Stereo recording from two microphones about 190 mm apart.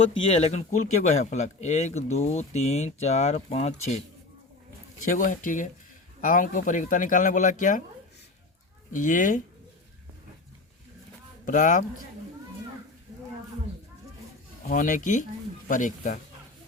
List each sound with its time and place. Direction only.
0.0 s a man's voice: 30° left (ahead or behind)
8.9 s speech: 45° left (ahead or behind)
11.4 s speech: 40° left (ahead or behind)
14.7 s speech: 45° left (ahead or behind)